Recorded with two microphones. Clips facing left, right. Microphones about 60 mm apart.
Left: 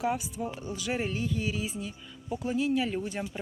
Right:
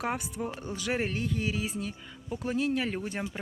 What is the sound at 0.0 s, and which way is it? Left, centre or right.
Speech, right.